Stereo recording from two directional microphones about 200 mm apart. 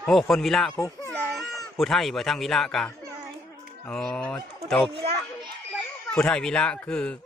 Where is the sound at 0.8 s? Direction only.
10° left (ahead or behind).